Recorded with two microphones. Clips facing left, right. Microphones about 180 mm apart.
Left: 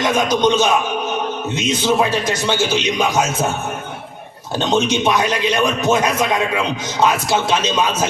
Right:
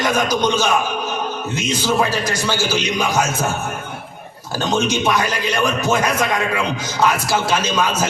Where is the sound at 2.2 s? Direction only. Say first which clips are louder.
Left 2 dB; 25° left (ahead or behind).